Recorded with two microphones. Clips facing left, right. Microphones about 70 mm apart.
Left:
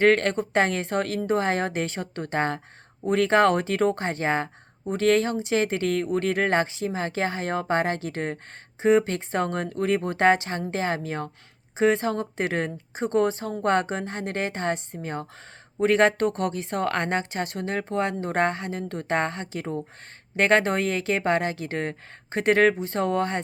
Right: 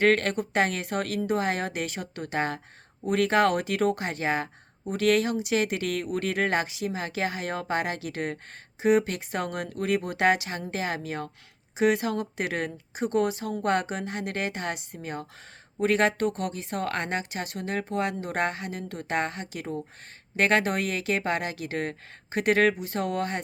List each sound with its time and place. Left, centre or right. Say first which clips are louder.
0.0 s a woman's voice: left 3 dB; left
12.7 s speech: left 1 dB; left
13.1 s a woman's voice: left 3 dB; left